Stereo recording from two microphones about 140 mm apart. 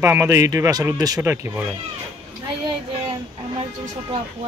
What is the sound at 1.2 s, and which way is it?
Speech, 15° right (ahead or behind).